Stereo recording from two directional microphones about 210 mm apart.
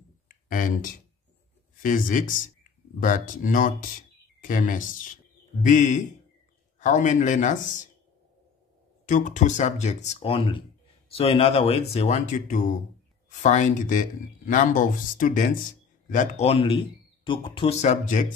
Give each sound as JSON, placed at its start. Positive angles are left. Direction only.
{"t": 0.3, "sound": "speech", "side_deg": 40}
{"t": 9.0, "sound": "a man's voice", "side_deg": 35}